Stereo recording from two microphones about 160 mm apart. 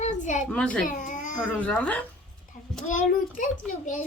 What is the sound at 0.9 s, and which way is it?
Baby cry, 55° left (ahead or behind).